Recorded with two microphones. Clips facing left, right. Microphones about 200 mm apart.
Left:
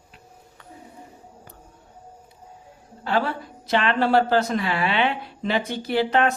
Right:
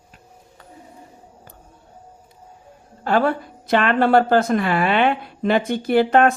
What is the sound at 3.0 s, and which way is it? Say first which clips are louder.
Speech: right 5 dB; 50° right (ahead or behind).